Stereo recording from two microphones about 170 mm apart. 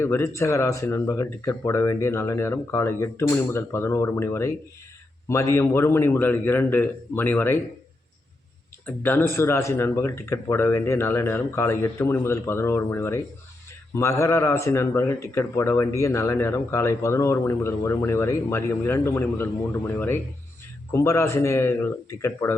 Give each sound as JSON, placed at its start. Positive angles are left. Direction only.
{"t": 0.0, "sound": "speech", "side_deg": 15}
{"t": 8.9, "sound": "speech", "side_deg": 10}